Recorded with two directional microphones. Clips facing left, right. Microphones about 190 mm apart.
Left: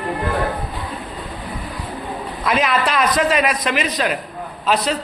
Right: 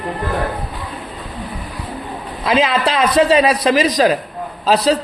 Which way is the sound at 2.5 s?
30° right (ahead or behind).